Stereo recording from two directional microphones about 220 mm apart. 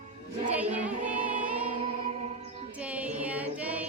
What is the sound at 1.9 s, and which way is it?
Music, 25° right (ahead or behind).